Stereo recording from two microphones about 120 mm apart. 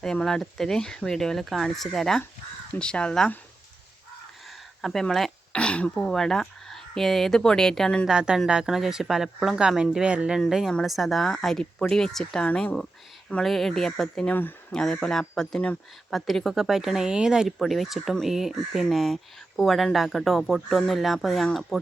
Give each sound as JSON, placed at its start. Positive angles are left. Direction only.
{"t": 0.0, "sound": "speech", "side_deg": 5}
{"t": 4.8, "sound": "speech", "side_deg": 0}
{"t": 8.0, "sound": "speech", "side_deg": -5}
{"t": 14.3, "sound": "speech", "side_deg": 15}
{"t": 14.8, "sound": "speech", "side_deg": 5}